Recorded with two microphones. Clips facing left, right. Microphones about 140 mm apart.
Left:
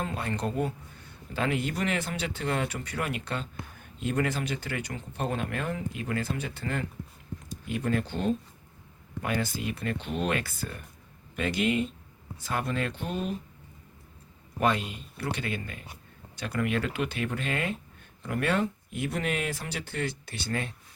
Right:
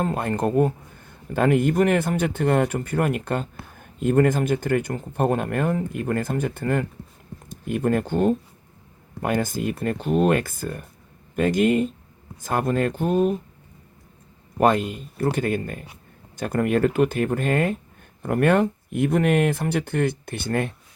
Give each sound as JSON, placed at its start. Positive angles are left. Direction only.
{"t": 0.0, "sound": "speech", "side_deg": -50}
{"t": 14.6, "sound": "speech", "side_deg": -50}